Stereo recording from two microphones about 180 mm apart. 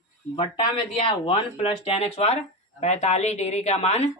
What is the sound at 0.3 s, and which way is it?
Speech, 30° left (ahead or behind).